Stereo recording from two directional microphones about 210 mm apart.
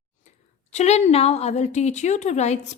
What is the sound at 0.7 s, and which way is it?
A woman's voice, 30° left (ahead or behind).